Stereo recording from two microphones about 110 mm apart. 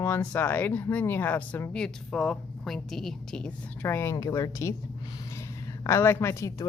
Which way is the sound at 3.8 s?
20° left (ahead or behind).